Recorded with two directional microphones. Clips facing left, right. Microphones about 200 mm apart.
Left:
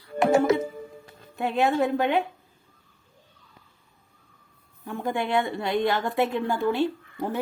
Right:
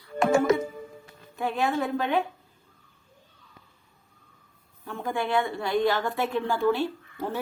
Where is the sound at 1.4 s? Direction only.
20° left (ahead or behind).